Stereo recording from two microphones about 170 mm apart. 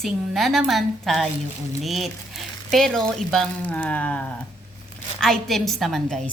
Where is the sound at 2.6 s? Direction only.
Centre (ahead or behind).